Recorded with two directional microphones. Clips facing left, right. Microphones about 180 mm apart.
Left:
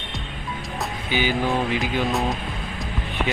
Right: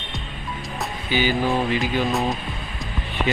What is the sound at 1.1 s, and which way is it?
Speech, 15° left (ahead or behind).